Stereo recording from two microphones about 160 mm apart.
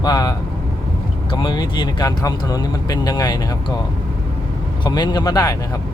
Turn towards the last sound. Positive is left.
turn(degrees=25)  # may be behind; listen again after turning